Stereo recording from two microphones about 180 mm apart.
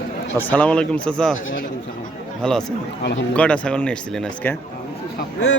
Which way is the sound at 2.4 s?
5° left (ahead or behind).